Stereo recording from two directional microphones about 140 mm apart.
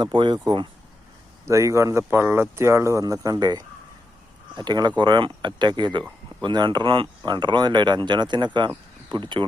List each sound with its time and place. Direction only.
0.0 s speech: 30° right (ahead or behind)
1.5 s speech: 20° right (ahead or behind)